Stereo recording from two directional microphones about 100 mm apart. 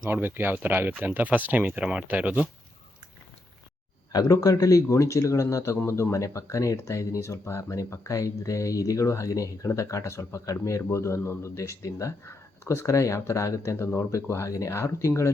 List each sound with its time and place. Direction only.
0.0 s speech: 20° right (ahead or behind)
4.1 s speech: 40° left (ahead or behind)